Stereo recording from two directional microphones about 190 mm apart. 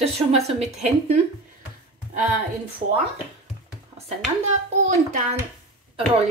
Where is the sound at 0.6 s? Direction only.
35° right (ahead or behind).